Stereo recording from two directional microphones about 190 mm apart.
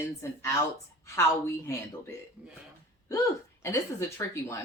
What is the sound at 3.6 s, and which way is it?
Speech, 15° left (ahead or behind).